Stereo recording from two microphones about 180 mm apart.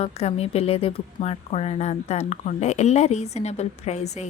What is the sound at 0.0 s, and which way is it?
A woman's voice, 35° left (ahead or behind).